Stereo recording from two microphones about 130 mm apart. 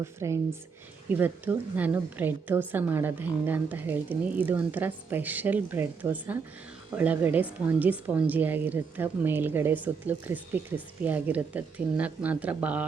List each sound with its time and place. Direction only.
0.0 s a woman's voice: 20° right (ahead or behind)